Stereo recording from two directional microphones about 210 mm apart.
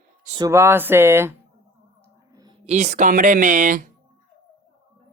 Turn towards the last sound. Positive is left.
turn(degrees=-40)  # may be behind; listen again after turning